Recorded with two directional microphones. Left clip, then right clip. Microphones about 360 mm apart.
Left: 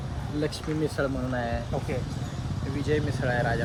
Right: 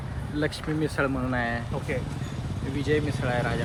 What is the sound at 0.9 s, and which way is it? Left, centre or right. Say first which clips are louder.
Speech: right 2 dB; centre.